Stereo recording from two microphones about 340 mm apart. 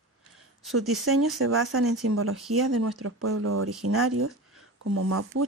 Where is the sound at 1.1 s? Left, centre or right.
Right.